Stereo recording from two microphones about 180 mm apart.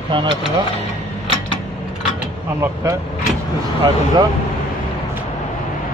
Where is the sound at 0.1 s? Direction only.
30° right (ahead or behind).